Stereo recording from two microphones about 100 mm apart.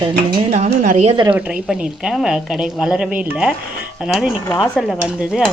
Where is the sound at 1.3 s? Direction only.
10° right (ahead or behind).